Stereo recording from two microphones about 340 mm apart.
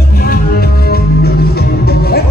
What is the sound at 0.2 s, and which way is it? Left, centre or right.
Music, left.